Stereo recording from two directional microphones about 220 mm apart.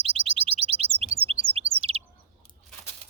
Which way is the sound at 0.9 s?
25° right (ahead or behind).